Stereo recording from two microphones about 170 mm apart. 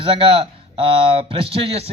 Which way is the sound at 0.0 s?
30° right (ahead or behind).